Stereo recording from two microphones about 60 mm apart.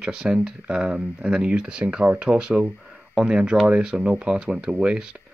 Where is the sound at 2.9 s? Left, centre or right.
Centre.